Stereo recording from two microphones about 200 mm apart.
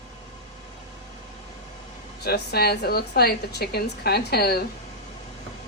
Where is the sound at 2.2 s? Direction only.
50° left (ahead or behind).